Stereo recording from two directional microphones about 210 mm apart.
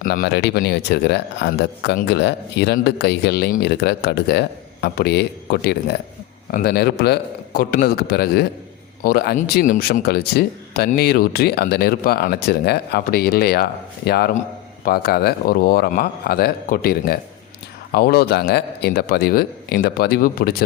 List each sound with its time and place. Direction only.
0.0 s speech: 45° left (ahead or behind)